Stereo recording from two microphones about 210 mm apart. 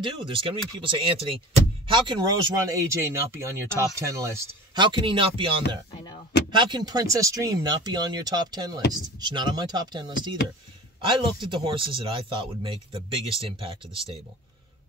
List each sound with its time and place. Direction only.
0.0 s speech: 25° right (ahead or behind)